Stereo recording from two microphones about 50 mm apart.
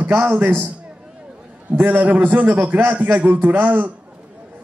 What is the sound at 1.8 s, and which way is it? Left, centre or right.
A man's voice, right.